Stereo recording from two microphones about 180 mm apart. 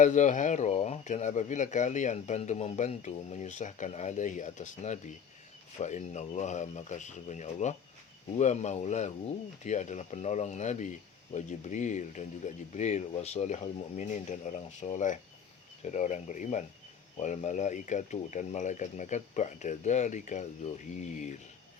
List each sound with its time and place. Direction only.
0.0 s speech: 45° left (ahead or behind)